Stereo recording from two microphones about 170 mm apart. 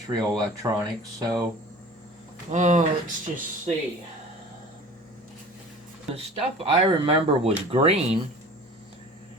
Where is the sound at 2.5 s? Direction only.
45° right (ahead or behind).